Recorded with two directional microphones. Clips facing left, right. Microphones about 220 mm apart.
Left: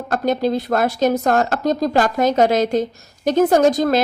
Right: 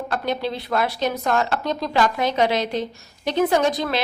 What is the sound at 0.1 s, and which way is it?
A woman's voice, 45° left (ahead or behind).